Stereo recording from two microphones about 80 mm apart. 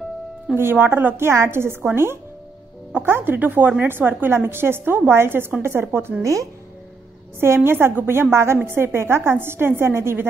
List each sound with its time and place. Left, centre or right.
0.6 s a woman's voice: right
6.2 s speech: right
7.3 s a woman's voice: right